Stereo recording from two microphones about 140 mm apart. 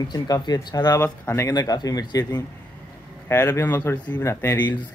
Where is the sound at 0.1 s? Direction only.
30° left (ahead or behind).